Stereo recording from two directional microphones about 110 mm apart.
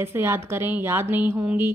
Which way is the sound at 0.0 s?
20° right (ahead or behind).